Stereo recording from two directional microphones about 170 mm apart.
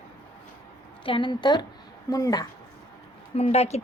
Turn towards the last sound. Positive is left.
turn(degrees=40)  # may be behind; listen again after turning